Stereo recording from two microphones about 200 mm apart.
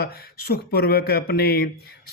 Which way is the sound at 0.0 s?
50° left (ahead or behind).